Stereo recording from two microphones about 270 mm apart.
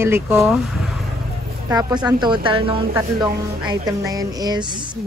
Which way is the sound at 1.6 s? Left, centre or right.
Centre.